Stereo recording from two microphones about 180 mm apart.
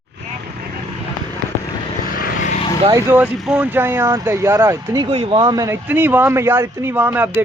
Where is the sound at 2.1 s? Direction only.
50° left (ahead or behind).